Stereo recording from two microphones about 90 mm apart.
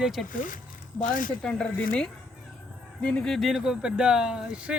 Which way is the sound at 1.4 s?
10° left (ahead or behind).